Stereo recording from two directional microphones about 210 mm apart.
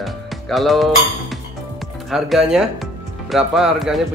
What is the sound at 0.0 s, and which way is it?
Music, centre (ahead or behind).